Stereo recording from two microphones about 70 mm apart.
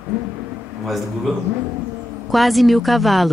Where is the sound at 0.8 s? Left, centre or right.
Centre.